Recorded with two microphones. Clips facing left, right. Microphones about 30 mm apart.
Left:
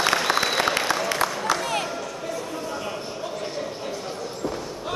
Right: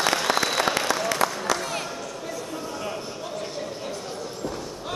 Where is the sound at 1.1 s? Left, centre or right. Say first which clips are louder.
Left 1 dB; centre.